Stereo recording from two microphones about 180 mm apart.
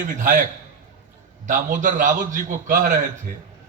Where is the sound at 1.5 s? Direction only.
45° right (ahead or behind).